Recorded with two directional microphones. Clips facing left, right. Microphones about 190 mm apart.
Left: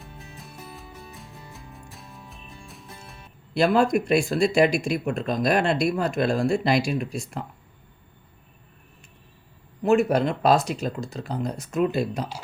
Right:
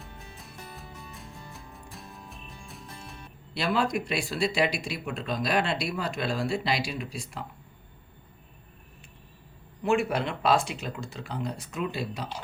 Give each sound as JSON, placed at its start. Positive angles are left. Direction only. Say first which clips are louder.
{"t": 0.0, "sound": "music", "louder": "left 3 dB", "side_deg": 0}
{"t": 3.5, "sound": "speech", "louder": "left 7 dB", "side_deg": 50}
{"t": 9.8, "sound": "speech", "louder": "left 6 dB", "side_deg": 40}